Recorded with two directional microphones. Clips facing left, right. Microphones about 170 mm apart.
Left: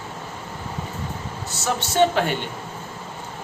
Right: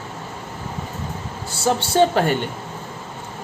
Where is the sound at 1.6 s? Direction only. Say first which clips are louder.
Right 3 dB; 30° right (ahead or behind).